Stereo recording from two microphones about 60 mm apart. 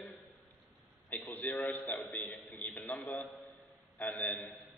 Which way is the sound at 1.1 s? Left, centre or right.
Left.